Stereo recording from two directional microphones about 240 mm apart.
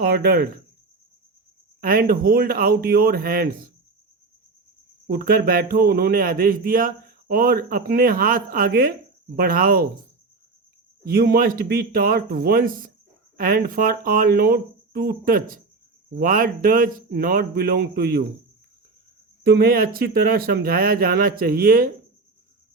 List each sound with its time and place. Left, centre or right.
0.0 s speech: right
1.8 s speech: right
5.0 s speech: right
11.0 s speech: right
19.5 s speech: right